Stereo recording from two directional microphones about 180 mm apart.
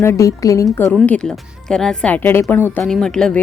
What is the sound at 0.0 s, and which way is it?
Speech, 15° left (ahead or behind).